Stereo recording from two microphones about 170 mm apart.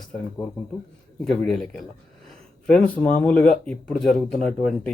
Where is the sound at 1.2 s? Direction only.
5° left (ahead or behind).